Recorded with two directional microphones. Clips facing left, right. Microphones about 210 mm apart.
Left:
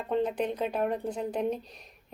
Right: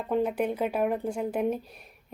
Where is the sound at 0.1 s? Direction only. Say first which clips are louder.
Right 2 dB; 5° right (ahead or behind).